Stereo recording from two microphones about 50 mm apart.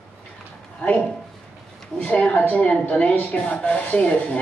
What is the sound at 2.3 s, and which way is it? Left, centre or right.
A woman's voice, left.